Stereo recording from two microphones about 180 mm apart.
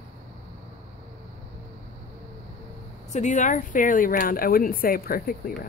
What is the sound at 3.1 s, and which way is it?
Speech, 40° left (ahead or behind).